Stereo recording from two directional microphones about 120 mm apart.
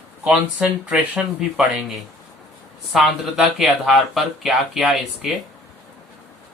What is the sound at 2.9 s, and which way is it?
Speech, centre (ahead or behind).